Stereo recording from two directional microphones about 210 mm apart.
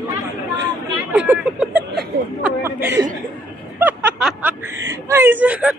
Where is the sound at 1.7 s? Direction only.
50° right (ahead or behind).